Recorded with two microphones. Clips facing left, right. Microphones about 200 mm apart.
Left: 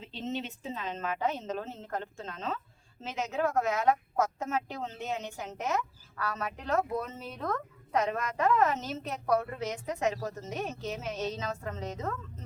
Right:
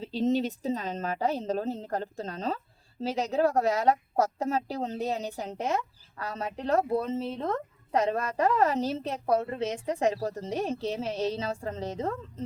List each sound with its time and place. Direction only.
0.0 s a woman's voice: 35° right (ahead or behind)